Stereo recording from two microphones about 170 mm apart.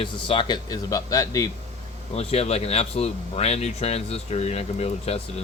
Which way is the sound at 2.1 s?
35° left (ahead or behind).